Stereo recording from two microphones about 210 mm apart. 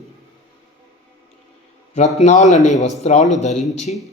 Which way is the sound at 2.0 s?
35° left (ahead or behind).